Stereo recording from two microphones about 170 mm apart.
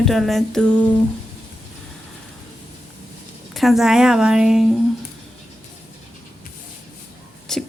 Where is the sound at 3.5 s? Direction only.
Centre (ahead or behind).